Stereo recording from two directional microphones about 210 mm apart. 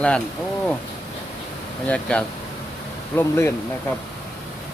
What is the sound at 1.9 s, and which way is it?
Speech, 5° left (ahead or behind).